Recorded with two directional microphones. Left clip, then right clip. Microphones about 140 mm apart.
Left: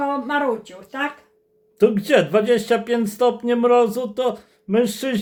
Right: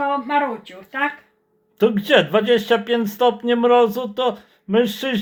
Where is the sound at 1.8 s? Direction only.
25° left (ahead or behind).